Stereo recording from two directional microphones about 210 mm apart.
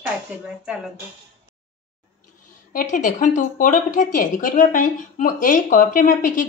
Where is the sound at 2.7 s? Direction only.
40° left (ahead or behind).